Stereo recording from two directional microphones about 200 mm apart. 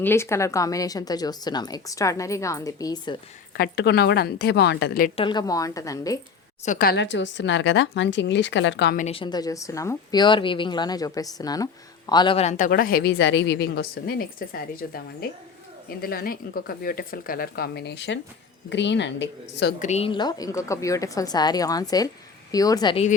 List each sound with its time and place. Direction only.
0.0 s a woman's voice: 10° left (ahead or behind)
3.5 s a woman's voice: 55° left (ahead or behind)
5.1 s a woman's voice: 25° left (ahead or behind)
6.7 s speech: 45° left (ahead or behind)
9.0 s a woman's voice: 30° left (ahead or behind); by 19.7 s 60° left (ahead or behind)
19.8 s a woman's voice: 30° left (ahead or behind)